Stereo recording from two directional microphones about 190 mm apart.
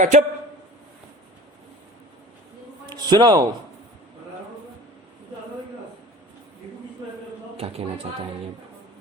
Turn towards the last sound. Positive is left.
turn(degrees=-30)  # may be behind; listen again after turning